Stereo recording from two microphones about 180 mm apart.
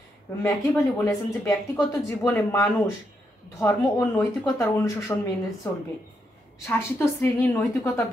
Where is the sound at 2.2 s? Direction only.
15° left (ahead or behind).